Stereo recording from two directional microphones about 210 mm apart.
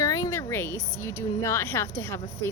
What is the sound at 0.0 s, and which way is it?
A woman's voice, 15° left (ahead or behind).